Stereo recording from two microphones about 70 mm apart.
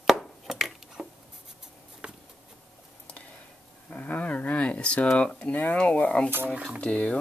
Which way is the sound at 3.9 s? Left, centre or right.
Left.